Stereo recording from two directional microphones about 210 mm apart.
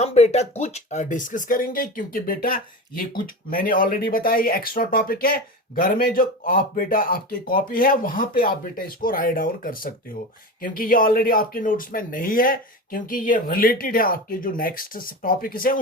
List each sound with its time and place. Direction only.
0.0 s speech: 30° left (ahead or behind)